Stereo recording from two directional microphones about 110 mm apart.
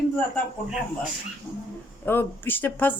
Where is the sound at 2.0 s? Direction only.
20° left (ahead or behind).